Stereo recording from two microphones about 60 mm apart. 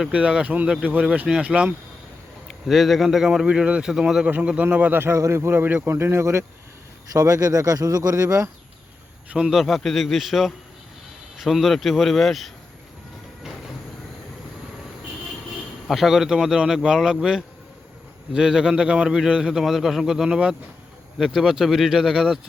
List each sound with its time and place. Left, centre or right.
0.1 s speech: centre
2.6 s a man's voice: centre
3.4 s a man's voice: centre
4.6 s speech: right
4.9 s speech: right
5.6 s speech: right
7.1 s speech: right
9.3 s a man's voice: centre
15.9 s a man's voice: centre